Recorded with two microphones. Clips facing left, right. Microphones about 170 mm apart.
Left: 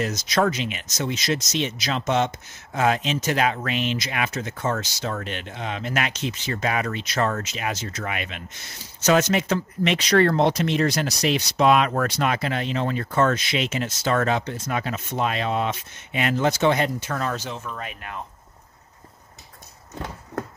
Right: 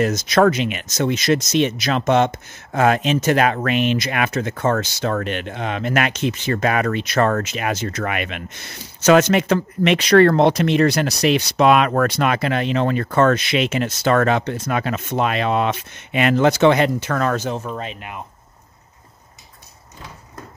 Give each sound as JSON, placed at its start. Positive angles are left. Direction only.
{"t": 0.0, "sound": "speech", "side_deg": -55}
{"t": 17.4, "sound": "speech", "side_deg": -40}
{"t": 17.8, "sound": "speech", "side_deg": -20}